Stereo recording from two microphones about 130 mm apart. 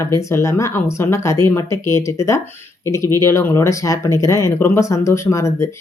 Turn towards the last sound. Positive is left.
turn(degrees=20)  # may be behind; listen again after turning